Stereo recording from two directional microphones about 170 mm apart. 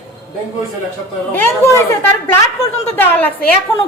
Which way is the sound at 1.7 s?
15° left (ahead or behind).